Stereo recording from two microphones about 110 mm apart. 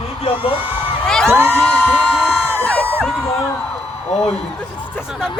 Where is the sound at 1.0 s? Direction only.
5° left (ahead or behind).